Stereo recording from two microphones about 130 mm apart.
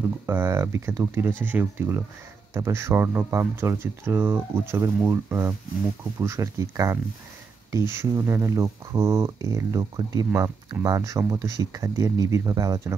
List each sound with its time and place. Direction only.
0.3 s speech: 20° right (ahead or behind)